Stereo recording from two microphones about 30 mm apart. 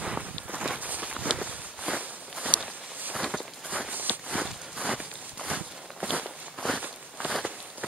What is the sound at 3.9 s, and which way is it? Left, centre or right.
Walk, right.